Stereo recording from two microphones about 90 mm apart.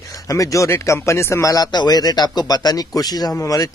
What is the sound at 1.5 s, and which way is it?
A man's voice, 50° left (ahead or behind).